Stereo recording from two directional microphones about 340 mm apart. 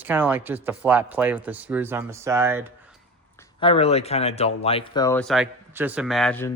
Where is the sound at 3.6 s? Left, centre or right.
Centre.